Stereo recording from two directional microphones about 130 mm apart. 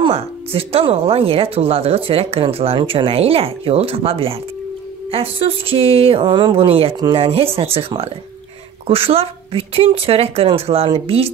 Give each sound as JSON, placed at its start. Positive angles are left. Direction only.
{"t": 0.0, "sound": "speech", "side_deg": -45}